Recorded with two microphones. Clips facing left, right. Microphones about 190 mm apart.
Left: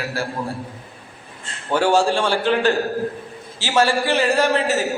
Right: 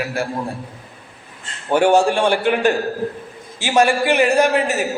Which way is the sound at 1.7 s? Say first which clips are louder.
Right 3 dB; 15° right (ahead or behind).